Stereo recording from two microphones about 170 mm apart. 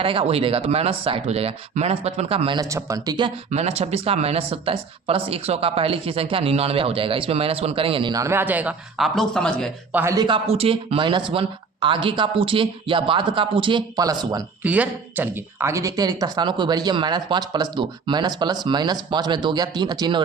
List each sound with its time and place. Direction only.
0.0 s speech: 35° right (ahead or behind)
2.6 s speech: 20° right (ahead or behind)
3.5 s speech: 40° right (ahead or behind); by 9.6 s 5° left (ahead or behind)
9.9 s a man's voice: 15° right (ahead or behind)
10.2 s speech: 35° right (ahead or behind)
14.6 s speech: 10° right (ahead or behind); by 20.2 s 25° right (ahead or behind)